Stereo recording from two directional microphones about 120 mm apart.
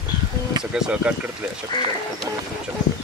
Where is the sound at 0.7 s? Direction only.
5° right (ahead or behind).